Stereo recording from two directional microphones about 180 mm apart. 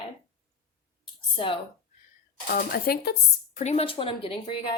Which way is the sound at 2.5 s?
55° left (ahead or behind).